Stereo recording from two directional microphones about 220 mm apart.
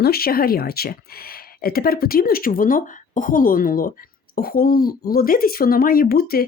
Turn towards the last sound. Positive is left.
turn(degrees=45)  # may be behind; listen again after turning